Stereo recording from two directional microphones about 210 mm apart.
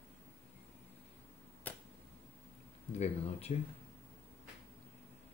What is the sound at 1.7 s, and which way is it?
Finger snapping, 5° left (ahead or behind).